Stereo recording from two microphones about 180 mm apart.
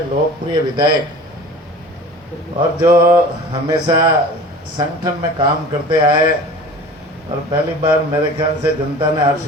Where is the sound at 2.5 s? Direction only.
25° right (ahead or behind).